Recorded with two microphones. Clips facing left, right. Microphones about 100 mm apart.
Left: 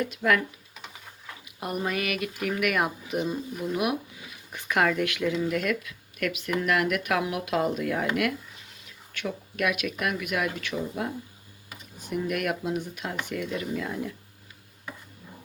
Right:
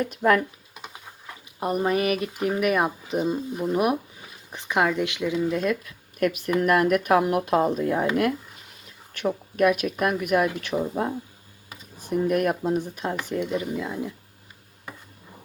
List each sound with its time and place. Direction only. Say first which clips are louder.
0.0 s speech: right 4 dB; 35° right (ahead or behind)
1.5 s speech: right 6 dB; 35° right (ahead or behind)
4.5 s speech: right 2 dB; 20° right (ahead or behind)
5.8 s speech: right 6 dB; 35° right (ahead or behind); by 14.1 s 20° right (ahead or behind)